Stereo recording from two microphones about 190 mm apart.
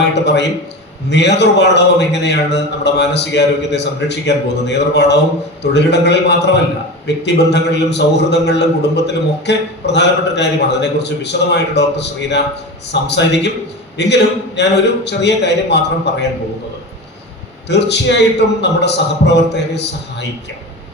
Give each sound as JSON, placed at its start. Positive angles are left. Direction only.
{"t": 0.1, "sound": "a man's voice", "side_deg": 65}
{"t": 17.7, "sound": "a man's voice", "side_deg": 65}